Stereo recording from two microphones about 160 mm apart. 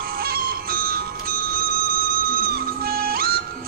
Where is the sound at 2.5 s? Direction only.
70° right (ahead or behind).